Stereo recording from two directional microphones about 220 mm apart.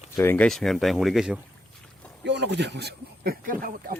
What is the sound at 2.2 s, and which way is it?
Speech, 50° right (ahead or behind).